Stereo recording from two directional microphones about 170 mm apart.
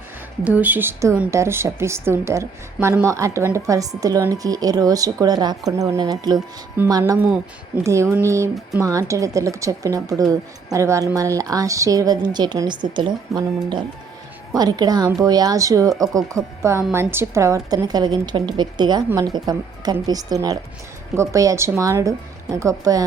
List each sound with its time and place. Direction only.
0.4 s a woman's voice: 10° right (ahead or behind)